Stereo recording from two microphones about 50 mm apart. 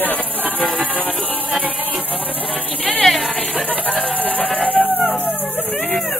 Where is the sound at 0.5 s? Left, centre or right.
Left.